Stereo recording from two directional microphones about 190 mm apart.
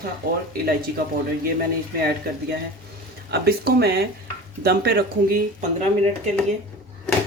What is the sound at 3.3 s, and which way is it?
Speech, 55° right (ahead or behind).